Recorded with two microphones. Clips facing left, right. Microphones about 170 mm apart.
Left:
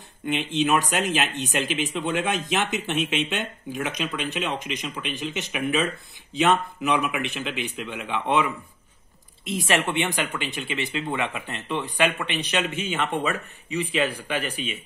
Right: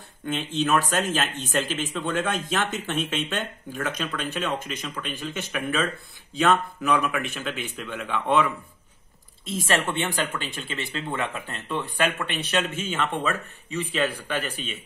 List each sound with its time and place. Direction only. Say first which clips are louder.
0.3 s speech: left 1 dB; 15° left (ahead or behind)
9.5 s speech: left 1 dB; 15° left (ahead or behind)
11.1 s speech: left 1 dB; centre (ahead or behind)
11.7 s speech: left 2 dB; 15° left (ahead or behind)